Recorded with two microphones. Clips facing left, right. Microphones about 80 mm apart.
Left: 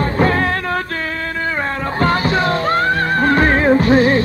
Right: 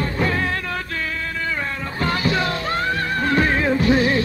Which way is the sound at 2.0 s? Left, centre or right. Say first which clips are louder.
Left 5 dB; left.